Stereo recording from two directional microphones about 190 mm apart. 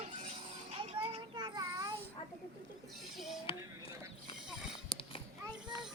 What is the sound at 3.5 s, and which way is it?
Music, 30° left (ahead or behind).